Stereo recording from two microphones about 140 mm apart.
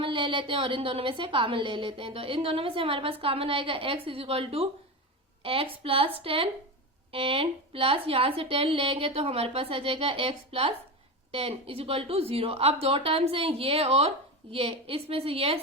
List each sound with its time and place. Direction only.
0.0 s a woman's voice: 35° right (ahead or behind)